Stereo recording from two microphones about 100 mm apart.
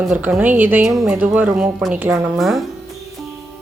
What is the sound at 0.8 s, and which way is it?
A woman's voice, 5° right (ahead or behind).